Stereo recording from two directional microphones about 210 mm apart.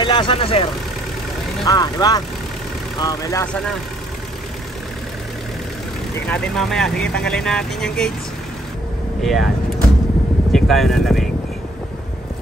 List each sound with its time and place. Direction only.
0.0 s speech: 20° left (ahead or behind)
6.2 s speech: 5° left (ahead or behind)
9.2 s speech: centre (ahead or behind)
10.5 s speech: centre (ahead or behind)